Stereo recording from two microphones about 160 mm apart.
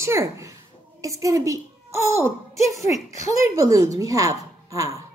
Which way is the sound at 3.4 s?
20° right (ahead or behind).